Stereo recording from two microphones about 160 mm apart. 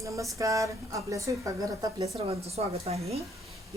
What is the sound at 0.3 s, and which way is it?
Speech, 20° right (ahead or behind).